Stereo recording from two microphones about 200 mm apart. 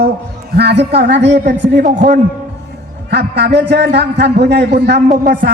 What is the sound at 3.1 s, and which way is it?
Speech, 55° right (ahead or behind).